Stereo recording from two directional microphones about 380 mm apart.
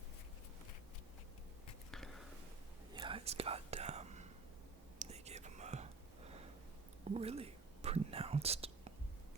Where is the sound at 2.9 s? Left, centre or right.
Centre.